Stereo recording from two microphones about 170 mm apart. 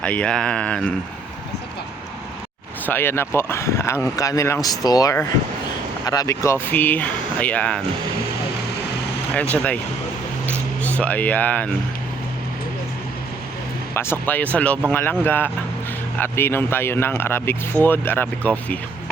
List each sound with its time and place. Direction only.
0.0 s speech: 5° left (ahead or behind)
2.8 s speech: 10° left (ahead or behind)
9.3 s speech: 10° left (ahead or behind)
10.8 s speech: 10° left (ahead or behind)
13.9 s speech: 15° left (ahead or behind)